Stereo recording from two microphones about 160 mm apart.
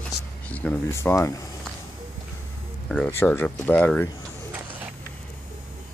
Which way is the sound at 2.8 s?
5° left (ahead or behind).